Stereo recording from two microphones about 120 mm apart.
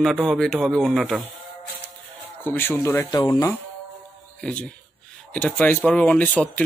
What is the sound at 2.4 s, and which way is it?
Speech, 20° left (ahead or behind).